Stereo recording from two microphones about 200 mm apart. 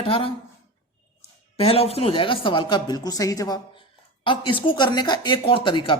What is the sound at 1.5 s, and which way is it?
Speech, 30° left (ahead or behind).